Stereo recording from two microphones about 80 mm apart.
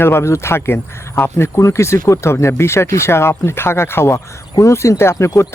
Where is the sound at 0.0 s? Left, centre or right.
Left.